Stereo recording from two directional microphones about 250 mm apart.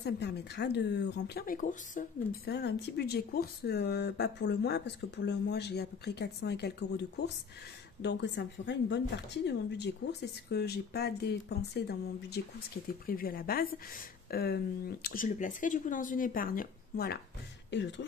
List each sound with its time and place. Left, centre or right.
0.0 s speech: left